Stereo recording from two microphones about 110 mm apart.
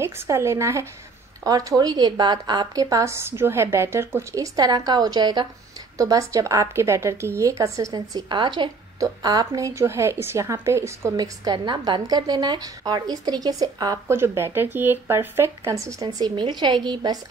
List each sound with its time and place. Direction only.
0.0 s a woman's voice: 25° right (ahead or behind)
11.1 s a woman's voice: 40° right (ahead or behind)
14.0 s speech: 25° right (ahead or behind); by 17.2 s 40° right (ahead or behind)